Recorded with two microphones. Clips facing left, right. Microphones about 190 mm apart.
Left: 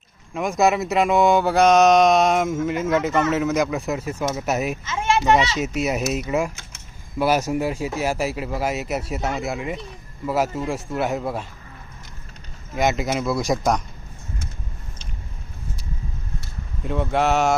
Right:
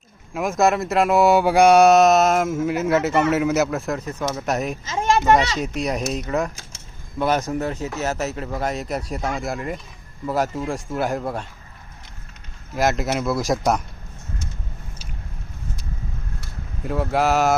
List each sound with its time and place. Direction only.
0.3 s speech: centre (ahead or behind)
4.9 s a sound: 35° right (ahead or behind)
5.5 s speech: 5° left (ahead or behind)
12.7 s speech: centre (ahead or behind)
16.8 s speech: centre (ahead or behind)